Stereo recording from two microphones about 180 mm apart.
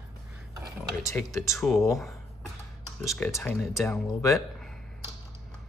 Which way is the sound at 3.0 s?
5° left (ahead or behind).